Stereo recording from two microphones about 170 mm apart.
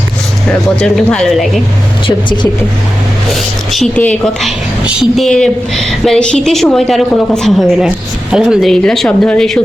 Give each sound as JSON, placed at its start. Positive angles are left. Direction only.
{"t": 0.8, "sound": "a woman's voice", "side_deg": 5}
{"t": 2.0, "sound": "speech", "side_deg": 25}
{"t": 3.3, "sound": "a woman's voice", "side_deg": 0}